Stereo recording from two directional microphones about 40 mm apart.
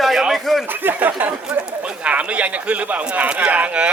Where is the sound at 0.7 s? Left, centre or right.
Right.